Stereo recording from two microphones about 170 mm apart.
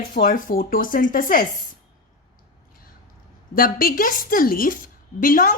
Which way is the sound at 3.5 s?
60° left (ahead or behind).